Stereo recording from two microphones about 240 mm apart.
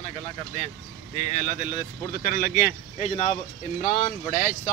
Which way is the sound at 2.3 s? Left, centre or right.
Left.